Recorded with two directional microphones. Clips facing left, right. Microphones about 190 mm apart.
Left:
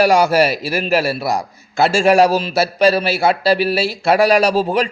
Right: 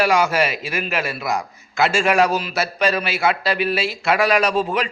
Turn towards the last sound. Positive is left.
turn(degrees=35)  # may be behind; listen again after turning